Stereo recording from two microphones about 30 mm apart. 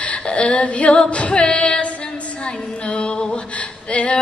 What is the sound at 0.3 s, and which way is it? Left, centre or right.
Female singing, left.